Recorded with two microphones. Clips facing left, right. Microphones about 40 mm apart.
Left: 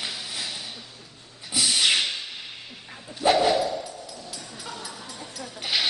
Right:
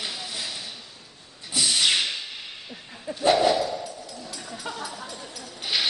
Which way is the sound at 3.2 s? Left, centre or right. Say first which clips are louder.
Even; centre.